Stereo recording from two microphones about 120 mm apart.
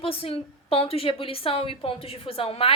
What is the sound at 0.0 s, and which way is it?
A woman's voice, 50° left (ahead or behind).